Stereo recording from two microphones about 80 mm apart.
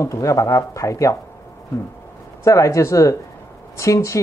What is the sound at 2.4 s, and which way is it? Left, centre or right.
Speech, left.